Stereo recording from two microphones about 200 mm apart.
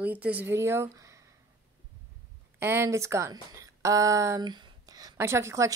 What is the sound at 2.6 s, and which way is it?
Speech, 10° right (ahead or behind).